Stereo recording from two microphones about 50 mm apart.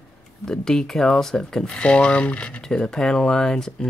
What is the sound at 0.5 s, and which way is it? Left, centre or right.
Speech, centre.